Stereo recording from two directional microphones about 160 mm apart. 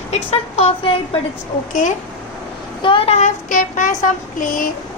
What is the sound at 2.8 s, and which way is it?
Speech, 35° left (ahead or behind).